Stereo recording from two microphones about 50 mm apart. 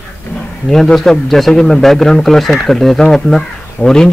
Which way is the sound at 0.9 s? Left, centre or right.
Centre.